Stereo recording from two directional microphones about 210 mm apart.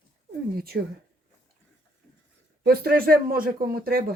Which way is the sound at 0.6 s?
45° right (ahead or behind).